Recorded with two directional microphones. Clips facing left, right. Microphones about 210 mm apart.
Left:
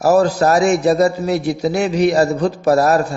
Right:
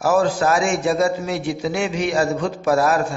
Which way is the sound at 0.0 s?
40° left (ahead or behind).